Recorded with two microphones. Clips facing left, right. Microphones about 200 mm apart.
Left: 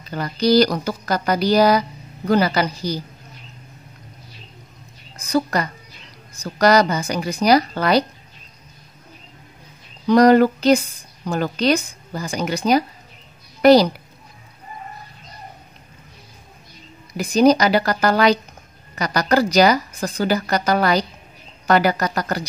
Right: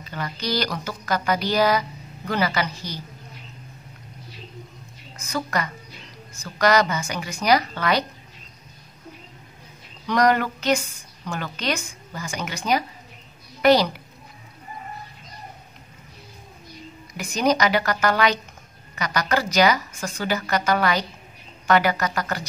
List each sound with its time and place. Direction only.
0.1 s speech: 35° left (ahead or behind)
5.1 s speech: 35° left (ahead or behind)
10.0 s a woman's voice: 35° left (ahead or behind)
17.1 s speech: 35° left (ahead or behind)